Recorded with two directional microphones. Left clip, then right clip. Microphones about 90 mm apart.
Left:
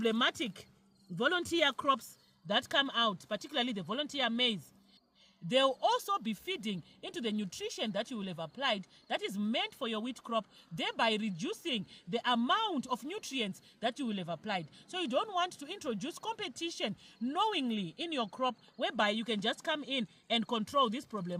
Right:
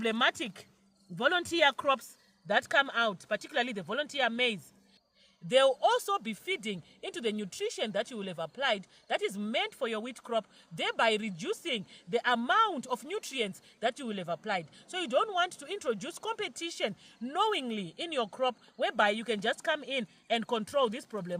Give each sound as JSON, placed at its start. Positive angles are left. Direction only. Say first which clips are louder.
{"t": 0.0, "sound": "speech", "louder": "right 2 dB", "side_deg": -35}